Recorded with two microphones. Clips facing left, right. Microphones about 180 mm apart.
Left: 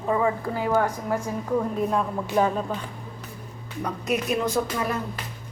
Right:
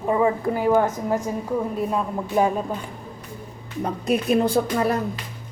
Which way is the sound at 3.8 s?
30° right (ahead or behind).